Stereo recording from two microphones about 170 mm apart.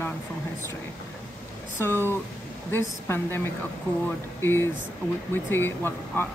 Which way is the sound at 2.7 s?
15° left (ahead or behind).